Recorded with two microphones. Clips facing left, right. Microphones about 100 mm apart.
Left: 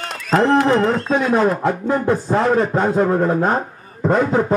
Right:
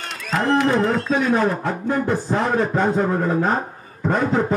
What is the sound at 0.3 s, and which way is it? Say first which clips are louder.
A man's voice: left 4 dB; 35° left (ahead or behind).